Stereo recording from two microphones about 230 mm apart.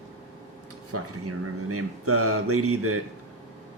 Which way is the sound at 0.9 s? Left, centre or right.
Right.